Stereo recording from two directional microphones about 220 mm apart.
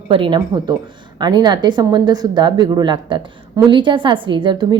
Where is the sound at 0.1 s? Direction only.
20° right (ahead or behind).